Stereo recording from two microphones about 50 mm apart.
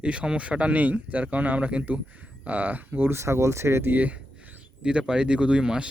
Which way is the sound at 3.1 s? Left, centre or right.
Right.